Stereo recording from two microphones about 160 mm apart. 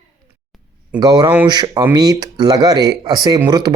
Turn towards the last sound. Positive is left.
turn(degrees=-25)  # may be behind; listen again after turning